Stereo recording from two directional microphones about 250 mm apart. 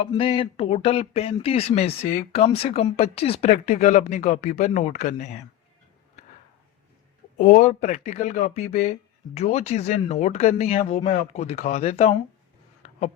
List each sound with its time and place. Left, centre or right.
0.1 s speech: left
7.3 s speech: left
8.6 s speech: left
9.3 s speech: left
12.8 s a sound: left